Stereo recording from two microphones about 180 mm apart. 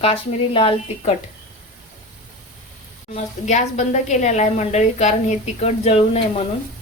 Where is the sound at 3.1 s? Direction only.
40° left (ahead or behind).